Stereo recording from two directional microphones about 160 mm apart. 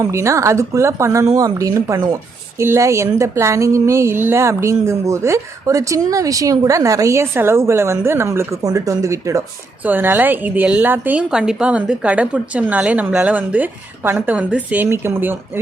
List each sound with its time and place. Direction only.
0.0 s a woman's voice: 20° right (ahead or behind)